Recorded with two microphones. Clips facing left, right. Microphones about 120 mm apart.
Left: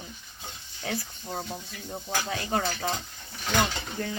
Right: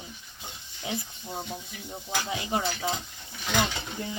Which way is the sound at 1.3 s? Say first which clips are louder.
Left 1 dB; 5° right (ahead or behind).